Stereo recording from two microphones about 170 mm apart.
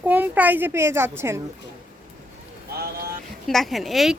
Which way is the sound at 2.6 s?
65° right (ahead or behind).